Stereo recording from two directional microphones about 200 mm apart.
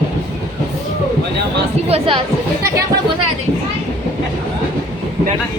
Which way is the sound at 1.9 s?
30° right (ahead or behind).